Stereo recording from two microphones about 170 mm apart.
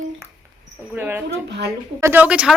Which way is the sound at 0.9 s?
10° right (ahead or behind).